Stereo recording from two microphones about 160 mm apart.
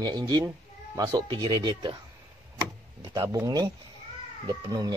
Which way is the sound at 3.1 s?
20° right (ahead or behind).